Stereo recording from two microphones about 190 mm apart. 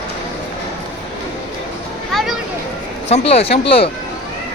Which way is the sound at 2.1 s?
5° left (ahead or behind).